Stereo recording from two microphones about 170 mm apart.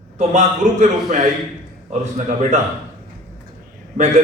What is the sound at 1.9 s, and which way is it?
Speech, 45° right (ahead or behind).